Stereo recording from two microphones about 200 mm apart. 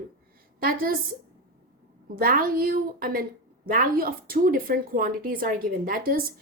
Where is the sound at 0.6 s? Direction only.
45° right (ahead or behind).